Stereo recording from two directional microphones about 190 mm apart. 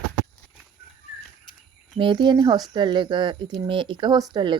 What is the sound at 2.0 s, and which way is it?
Speech, 25° right (ahead or behind).